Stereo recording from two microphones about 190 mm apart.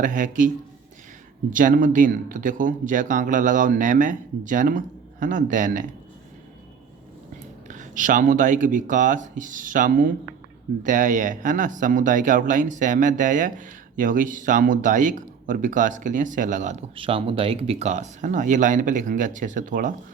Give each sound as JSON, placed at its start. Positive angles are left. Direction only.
{"t": 0.0, "sound": "speech", "side_deg": -45}
{"t": 7.7, "sound": "speech", "side_deg": -40}